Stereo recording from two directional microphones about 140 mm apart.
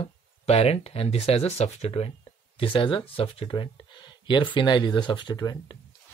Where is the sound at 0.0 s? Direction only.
45° left (ahead or behind); by 5.8 s 30° left (ahead or behind).